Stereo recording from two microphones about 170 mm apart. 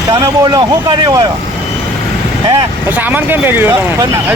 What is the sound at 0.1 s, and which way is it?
Speech, 25° right (ahead or behind).